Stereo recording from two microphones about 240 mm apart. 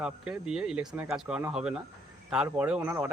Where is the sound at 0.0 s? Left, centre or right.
Centre.